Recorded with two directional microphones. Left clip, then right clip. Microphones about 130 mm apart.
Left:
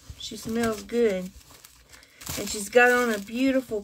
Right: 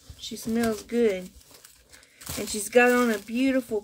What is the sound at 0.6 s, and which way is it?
Speech, 35° right (ahead or behind).